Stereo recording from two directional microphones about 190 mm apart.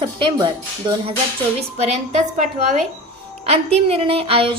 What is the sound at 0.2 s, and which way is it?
Speech, 25° right (ahead or behind).